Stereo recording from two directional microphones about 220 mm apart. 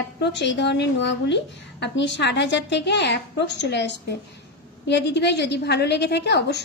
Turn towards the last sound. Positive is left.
turn(degrees=50)  # may be behind; listen again after turning